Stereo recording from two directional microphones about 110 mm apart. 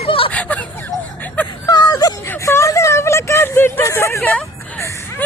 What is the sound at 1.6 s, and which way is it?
Whimper, 35° left (ahead or behind).